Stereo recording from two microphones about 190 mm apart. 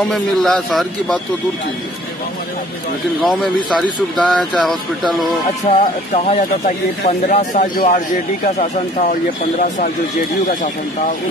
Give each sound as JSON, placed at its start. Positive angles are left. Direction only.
{"t": 0.0, "sound": "a man's voice", "side_deg": 0}
{"t": 3.2, "sound": "a man's voice", "side_deg": 0}
{"t": 5.7, "sound": "speech", "side_deg": 40}